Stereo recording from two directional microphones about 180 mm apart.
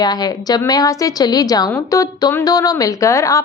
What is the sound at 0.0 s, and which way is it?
A woman's voice, 20° left (ahead or behind).